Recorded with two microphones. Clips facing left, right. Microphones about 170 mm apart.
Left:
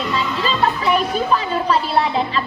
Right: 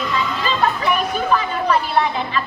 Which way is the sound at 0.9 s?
30° left (ahead or behind).